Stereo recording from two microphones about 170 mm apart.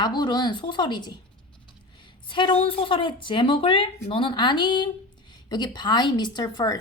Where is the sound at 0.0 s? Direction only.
25° left (ahead or behind).